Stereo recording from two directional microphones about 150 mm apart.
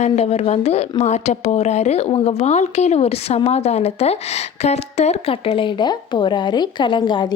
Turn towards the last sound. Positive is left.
turn(degrees=30)  # may be behind; listen again after turning